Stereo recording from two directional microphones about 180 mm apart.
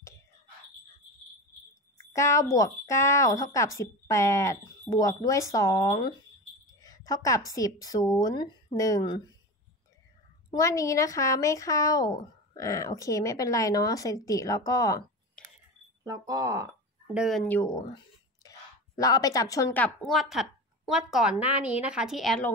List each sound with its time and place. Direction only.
2.1 s speech: 15° left (ahead or behind)
5.9 s a sound: 20° left (ahead or behind)
7.1 s speech: 20° left (ahead or behind)
10.5 s speech: 15° left (ahead or behind)
16.0 s speech: 20° right (ahead or behind)
17.1 s a woman's voice: centre (ahead or behind)
17.5 s a woman's voice: 15° left (ahead or behind)